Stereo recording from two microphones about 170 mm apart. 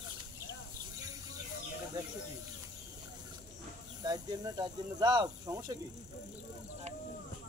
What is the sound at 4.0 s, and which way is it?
Speech, 25° right (ahead or behind).